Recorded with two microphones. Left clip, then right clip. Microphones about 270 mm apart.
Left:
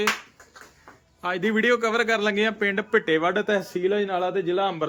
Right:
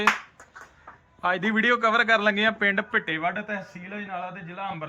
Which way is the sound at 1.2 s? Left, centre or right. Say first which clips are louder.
Even; centre.